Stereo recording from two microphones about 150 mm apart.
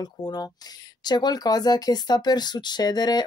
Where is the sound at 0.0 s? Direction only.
25° left (ahead or behind).